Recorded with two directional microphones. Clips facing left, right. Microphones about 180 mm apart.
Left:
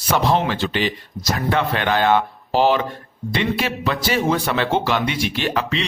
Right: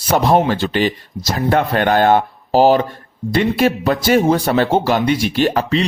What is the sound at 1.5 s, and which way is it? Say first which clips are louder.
A man's voice: right 6 dB; 45° right (ahead or behind).